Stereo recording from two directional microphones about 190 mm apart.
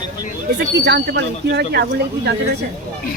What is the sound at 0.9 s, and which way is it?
Speech, 65° right (ahead or behind).